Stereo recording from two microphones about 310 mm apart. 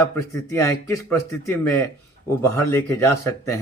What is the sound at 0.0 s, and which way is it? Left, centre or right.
A man's voice, centre.